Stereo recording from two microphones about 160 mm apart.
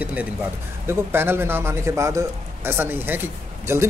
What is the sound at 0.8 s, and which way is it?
A man's voice, 15° right (ahead or behind).